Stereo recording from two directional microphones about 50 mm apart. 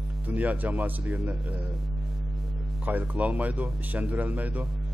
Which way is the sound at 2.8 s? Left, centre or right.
Right.